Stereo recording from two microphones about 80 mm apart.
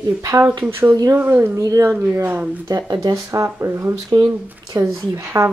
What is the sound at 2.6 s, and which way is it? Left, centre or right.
Speech, right.